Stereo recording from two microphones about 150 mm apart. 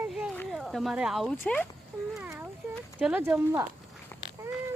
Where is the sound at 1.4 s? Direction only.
10° left (ahead or behind).